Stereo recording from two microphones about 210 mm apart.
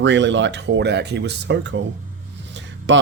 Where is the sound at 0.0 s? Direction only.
60° right (ahead or behind).